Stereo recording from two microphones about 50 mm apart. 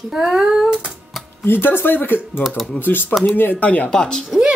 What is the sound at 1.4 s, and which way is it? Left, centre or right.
Speech, left.